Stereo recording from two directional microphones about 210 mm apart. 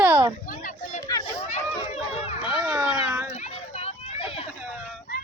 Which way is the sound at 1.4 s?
30° left (ahead or behind).